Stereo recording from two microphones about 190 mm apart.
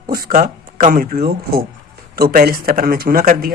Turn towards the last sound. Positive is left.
turn(degrees=-50)  # may be behind; listen again after turning